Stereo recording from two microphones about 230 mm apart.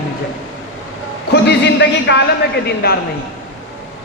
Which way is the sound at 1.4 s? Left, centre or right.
Left.